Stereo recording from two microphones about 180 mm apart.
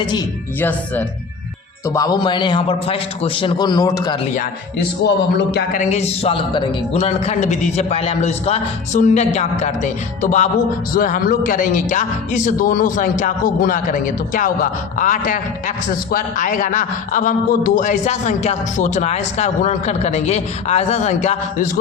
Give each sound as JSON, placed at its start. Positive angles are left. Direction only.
{"t": 1.9, "sound": "a man's voice", "side_deg": 20}
{"t": 4.4, "sound": "speech", "side_deg": 65}
{"t": 5.9, "sound": "a man's voice", "side_deg": 35}